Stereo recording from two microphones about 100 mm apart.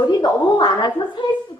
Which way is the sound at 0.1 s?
45° left (ahead or behind).